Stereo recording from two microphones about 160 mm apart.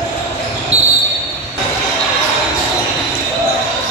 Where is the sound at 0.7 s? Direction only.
40° right (ahead or behind).